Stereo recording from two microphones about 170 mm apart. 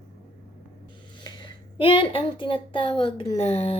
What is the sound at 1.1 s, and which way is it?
Speech, 25° left (ahead or behind).